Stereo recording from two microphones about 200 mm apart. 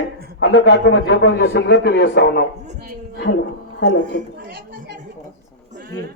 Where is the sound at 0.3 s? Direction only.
65° left (ahead or behind).